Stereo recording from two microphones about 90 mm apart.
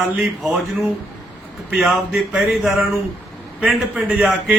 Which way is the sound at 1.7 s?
Centre (ahead or behind).